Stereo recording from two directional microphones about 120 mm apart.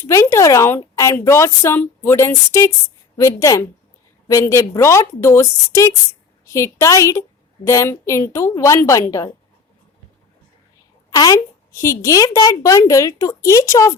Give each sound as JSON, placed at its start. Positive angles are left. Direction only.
{"t": 0.0, "sound": "a woman's voice", "side_deg": 20}
{"t": 11.1, "sound": "a woman's voice", "side_deg": 30}